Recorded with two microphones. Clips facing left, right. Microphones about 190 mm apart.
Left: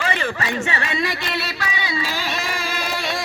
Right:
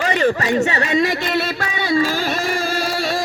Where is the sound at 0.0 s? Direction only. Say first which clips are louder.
Right 7 dB; 40° right (ahead or behind).